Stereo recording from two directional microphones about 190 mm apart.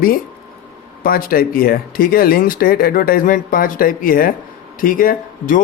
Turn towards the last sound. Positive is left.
turn(degrees=45)  # may be behind; listen again after turning